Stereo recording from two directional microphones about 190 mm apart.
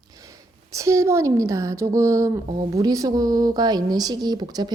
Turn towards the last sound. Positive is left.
turn(degrees=-20)  # may be behind; listen again after turning